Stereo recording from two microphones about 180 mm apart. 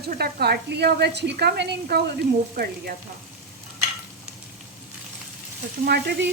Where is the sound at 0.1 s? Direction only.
60° right (ahead or behind).